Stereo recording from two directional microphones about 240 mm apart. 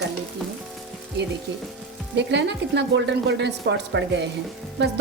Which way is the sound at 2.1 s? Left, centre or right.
Right.